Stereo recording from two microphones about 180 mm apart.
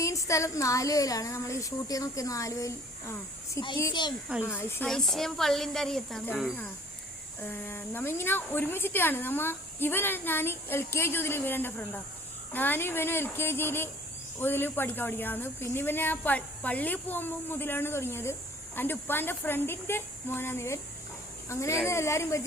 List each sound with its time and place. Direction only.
0.0 s speech: 15° left (ahead or behind); by 6.5 s centre (ahead or behind)
7.4 s speech: 10° left (ahead or behind)